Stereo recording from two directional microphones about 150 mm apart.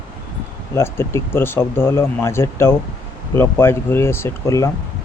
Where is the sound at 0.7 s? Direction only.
20° left (ahead or behind).